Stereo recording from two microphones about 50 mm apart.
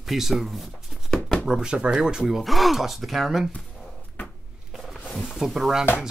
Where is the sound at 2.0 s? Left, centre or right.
Centre.